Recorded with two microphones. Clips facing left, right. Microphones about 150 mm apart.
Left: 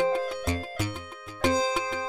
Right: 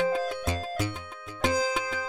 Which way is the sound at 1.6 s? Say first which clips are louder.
Left 1 dB; 20° left (ahead or behind).